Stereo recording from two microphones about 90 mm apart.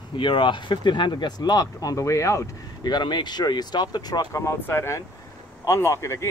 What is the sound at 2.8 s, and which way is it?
Speech, 55° left (ahead or behind).